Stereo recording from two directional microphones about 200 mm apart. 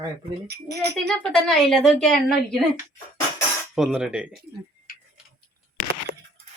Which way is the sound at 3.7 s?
5° right (ahead or behind).